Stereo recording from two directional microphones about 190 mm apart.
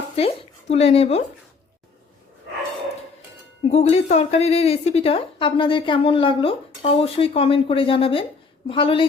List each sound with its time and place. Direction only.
0.2 s speech: 35° left (ahead or behind)
3.6 s speech: 35° left (ahead or behind)